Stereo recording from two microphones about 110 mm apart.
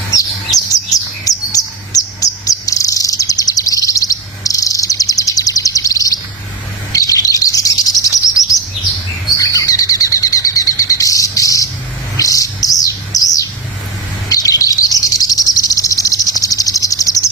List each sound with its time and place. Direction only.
0.1 s chirp: 35° left (ahead or behind)
9.4 s bird: 30° left (ahead or behind)
12.1 s chirp: 30° left (ahead or behind)
14.3 s cricket: 35° left (ahead or behind)
16.4 s a sound: 30° left (ahead or behind)